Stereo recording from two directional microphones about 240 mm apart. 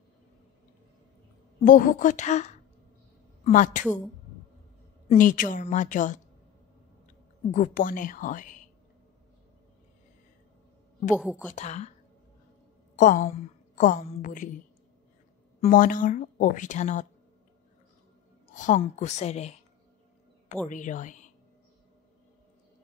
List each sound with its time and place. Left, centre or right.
1.6 s speech: left
5.0 s speech: left
7.5 s speech: left
11.1 s a woman's voice: centre
11.5 s a woman's voice: left
12.9 s a woman's voice: left
15.6 s speech: left
18.5 s a woman's voice: left
20.6 s speech: left